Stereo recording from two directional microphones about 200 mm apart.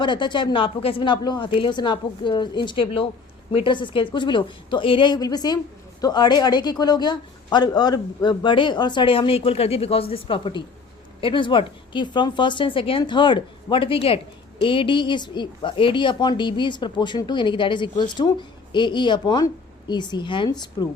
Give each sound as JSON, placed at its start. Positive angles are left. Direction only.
{"t": 0.0, "sound": "speech", "side_deg": 25}